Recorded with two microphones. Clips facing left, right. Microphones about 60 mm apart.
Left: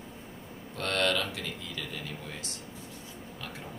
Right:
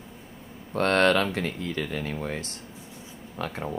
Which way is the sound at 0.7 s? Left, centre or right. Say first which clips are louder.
Right 8 dB; right.